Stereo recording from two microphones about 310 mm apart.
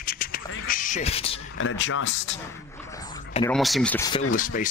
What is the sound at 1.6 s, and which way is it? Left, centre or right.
Speech, left.